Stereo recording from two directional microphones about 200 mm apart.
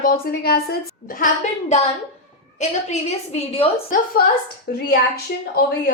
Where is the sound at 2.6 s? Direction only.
30° left (ahead or behind).